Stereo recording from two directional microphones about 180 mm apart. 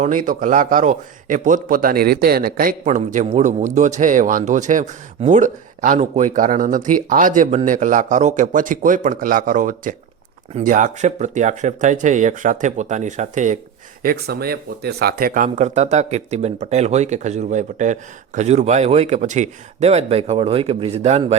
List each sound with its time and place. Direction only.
0.0 s a man's voice: 45° right (ahead or behind)
14.0 s speech: 55° right (ahead or behind)
15.4 s speech: 40° right (ahead or behind)